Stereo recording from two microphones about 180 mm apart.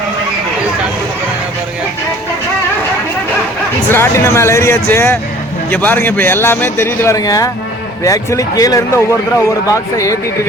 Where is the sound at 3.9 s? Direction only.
15° left (ahead or behind).